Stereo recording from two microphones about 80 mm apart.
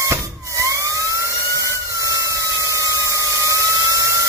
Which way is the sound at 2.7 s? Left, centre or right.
Right.